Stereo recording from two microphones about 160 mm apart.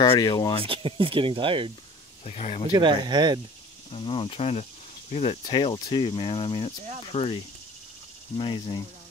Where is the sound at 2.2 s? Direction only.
40° left (ahead or behind).